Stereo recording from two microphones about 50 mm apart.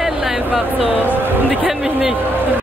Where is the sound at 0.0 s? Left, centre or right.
Centre.